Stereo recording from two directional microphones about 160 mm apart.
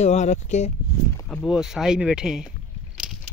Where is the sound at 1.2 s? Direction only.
Centre (ahead or behind).